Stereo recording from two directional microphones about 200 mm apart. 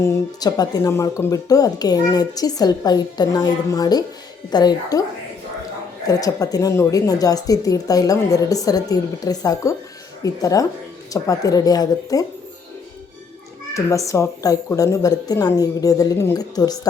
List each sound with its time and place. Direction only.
0.0 s a woman's voice: 15° left (ahead or behind)
6.1 s a woman's voice: 15° left (ahead or behind)
13.7 s a woman's voice: 15° left (ahead or behind)